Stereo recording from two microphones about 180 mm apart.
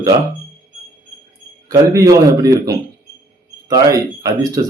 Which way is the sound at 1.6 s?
20° right (ahead or behind).